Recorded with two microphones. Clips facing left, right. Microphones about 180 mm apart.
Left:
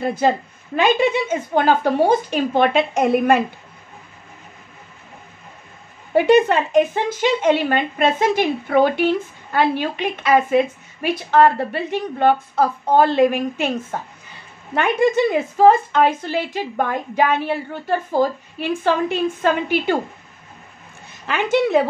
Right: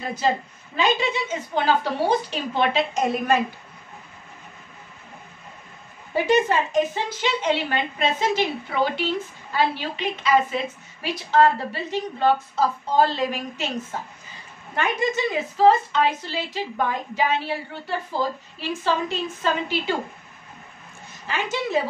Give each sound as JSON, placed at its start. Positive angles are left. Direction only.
{"t": 0.0, "sound": "a woman's voice", "side_deg": 55}
{"t": 6.1, "sound": "a woman's voice", "side_deg": 60}
{"t": 21.3, "sound": "a woman's voice", "side_deg": 60}